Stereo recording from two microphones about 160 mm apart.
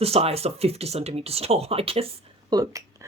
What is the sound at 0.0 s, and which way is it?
Speech, 40° right (ahead or behind).